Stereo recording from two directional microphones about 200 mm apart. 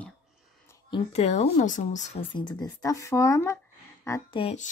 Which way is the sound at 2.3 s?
20° left (ahead or behind).